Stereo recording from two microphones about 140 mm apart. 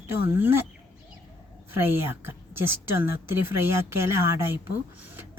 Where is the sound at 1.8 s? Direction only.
15° right (ahead or behind).